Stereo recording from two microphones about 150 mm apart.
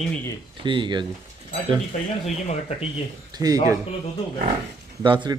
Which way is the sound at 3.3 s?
25° right (ahead or behind).